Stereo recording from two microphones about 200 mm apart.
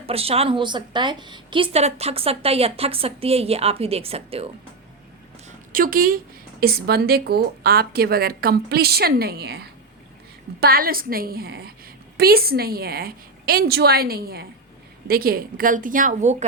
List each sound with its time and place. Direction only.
0.0 s a woman's voice: 30° right (ahead or behind)
5.5 s a sound: 45° right (ahead or behind)
6.6 s a woman's voice: 50° right (ahead or behind)